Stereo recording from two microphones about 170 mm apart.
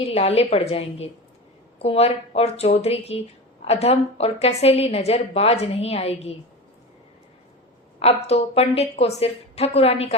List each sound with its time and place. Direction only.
0.0 s a woman's voice: 35° left (ahead or behind)
7.9 s a woman's voice: 35° left (ahead or behind)